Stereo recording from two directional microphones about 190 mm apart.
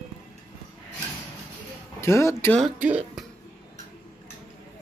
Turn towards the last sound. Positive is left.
turn(degrees=-5)  # may be behind; listen again after turning